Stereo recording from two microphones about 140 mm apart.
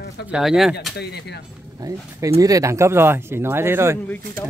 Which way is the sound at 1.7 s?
25° right (ahead or behind).